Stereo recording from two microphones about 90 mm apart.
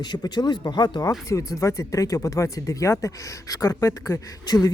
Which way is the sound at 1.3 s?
35° left (ahead or behind).